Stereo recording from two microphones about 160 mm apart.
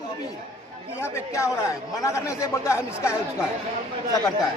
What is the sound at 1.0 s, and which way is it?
Speech, 15° left (ahead or behind).